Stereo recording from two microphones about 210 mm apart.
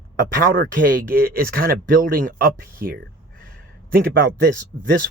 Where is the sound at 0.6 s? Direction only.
40° right (ahead or behind).